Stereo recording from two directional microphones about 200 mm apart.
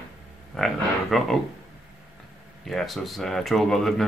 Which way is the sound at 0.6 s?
Centre (ahead or behind).